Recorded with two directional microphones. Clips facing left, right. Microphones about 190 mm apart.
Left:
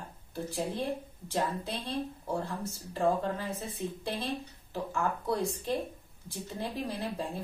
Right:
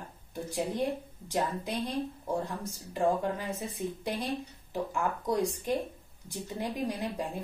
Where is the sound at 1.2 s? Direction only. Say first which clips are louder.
Right 1 dB; 15° right (ahead or behind).